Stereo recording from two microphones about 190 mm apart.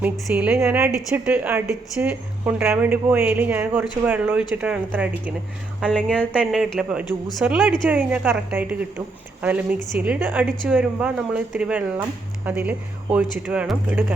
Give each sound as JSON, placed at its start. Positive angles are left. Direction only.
{"t": 0.0, "sound": "a woman's voice", "side_deg": -5}
{"t": 6.1, "sound": "a woman's voice", "side_deg": 5}